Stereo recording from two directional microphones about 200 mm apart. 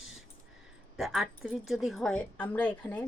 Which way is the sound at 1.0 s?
Centre (ahead or behind).